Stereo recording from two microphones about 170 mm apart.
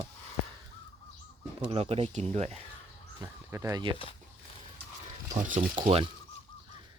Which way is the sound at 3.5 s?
15° right (ahead or behind).